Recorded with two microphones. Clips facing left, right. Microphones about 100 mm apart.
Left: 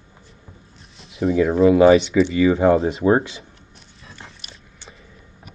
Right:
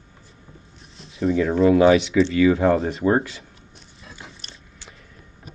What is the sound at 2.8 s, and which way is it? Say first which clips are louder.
Speech: left 4 dB; 30° left (ahead or behind).